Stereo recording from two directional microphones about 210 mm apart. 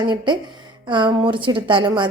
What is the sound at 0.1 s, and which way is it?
A woman's voice, 20° right (ahead or behind).